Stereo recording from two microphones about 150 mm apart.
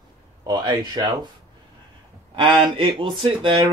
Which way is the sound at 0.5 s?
30° right (ahead or behind).